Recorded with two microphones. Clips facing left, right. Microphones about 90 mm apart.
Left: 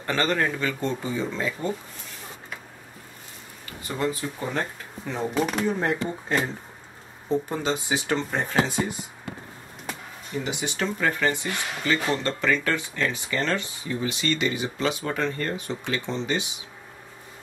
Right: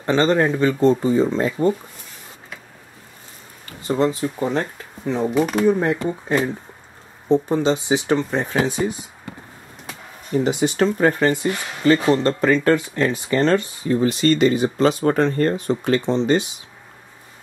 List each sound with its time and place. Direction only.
0.0 s speech: 25° right (ahead or behind); by 1.7 s 40° right (ahead or behind)
3.8 s speech: 30° right (ahead or behind)
10.3 s speech: 40° right (ahead or behind)